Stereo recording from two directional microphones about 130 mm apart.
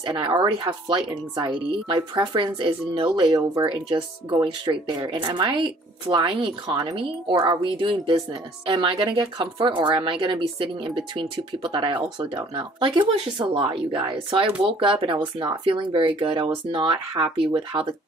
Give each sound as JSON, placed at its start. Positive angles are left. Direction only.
{"t": 0.0, "sound": "a woman's voice", "side_deg": -40}